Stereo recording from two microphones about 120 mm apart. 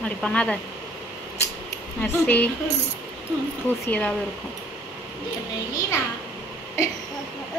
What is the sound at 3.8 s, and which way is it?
Speech, 10° left (ahead or behind).